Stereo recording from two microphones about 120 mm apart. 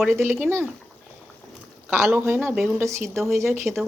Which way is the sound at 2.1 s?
20° right (ahead or behind).